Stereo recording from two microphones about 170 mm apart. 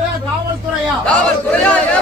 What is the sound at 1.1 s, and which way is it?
Speech, 5° left (ahead or behind).